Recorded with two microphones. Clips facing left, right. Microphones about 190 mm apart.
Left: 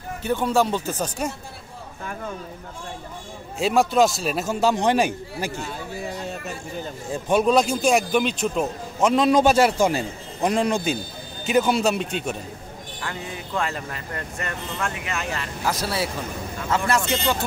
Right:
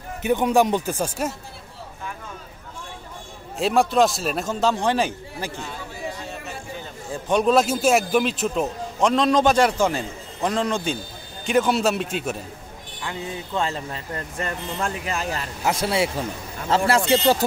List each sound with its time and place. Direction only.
0.2 s speech: 15° right (ahead or behind)
3.5 s a man's voice: centre (ahead or behind)
7.2 s a man's voice: 5° left (ahead or behind)
13.0 s speech: 20° right (ahead or behind)